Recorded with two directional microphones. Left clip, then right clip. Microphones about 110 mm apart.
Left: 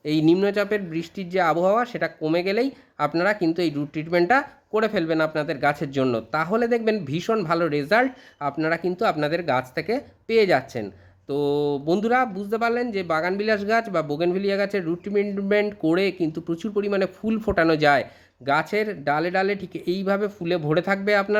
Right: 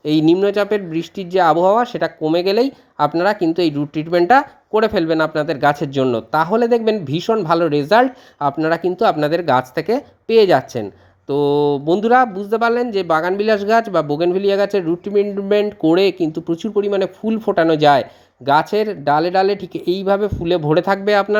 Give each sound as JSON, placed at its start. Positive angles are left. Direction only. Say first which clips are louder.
{"t": 0.0, "sound": "speech", "louder": "right 6 dB", "side_deg": -20}